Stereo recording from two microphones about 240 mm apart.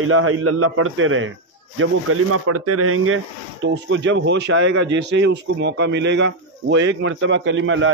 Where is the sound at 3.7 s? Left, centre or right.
Right.